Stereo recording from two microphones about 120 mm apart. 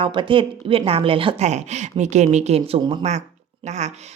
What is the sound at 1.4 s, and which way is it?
Speech, 70° right (ahead or behind).